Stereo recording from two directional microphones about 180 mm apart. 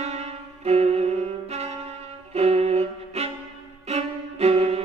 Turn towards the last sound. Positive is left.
turn(degrees=-35)  # may be behind; listen again after turning